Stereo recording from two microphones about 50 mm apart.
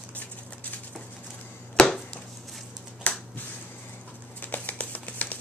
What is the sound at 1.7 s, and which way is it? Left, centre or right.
Chopping, centre.